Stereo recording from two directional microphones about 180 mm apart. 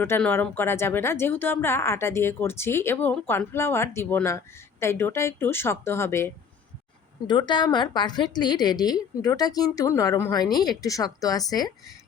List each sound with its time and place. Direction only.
0.0 s speech: 10° left (ahead or behind)
7.3 s a woman's voice: 25° left (ahead or behind)